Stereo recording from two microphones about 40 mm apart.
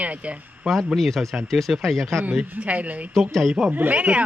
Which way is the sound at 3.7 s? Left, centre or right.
Right.